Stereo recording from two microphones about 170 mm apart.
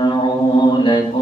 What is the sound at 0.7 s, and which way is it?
Mantra, 30° left (ahead or behind).